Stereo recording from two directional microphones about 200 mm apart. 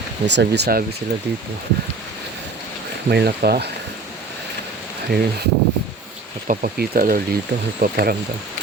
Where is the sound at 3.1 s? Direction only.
55° right (ahead or behind).